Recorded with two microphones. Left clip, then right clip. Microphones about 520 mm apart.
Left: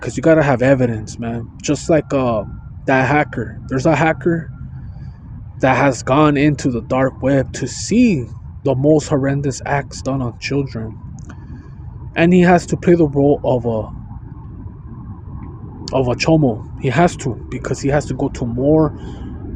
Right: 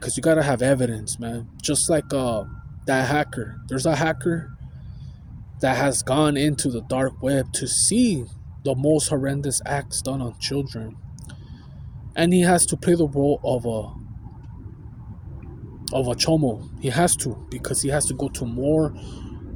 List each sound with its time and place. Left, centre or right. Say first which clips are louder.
0.0 s speech: left 7 dB; right
5.5 s speech: left 7 dB; right
12.1 s speech: left 7 dB; right
15.9 s speech: left 6 dB; right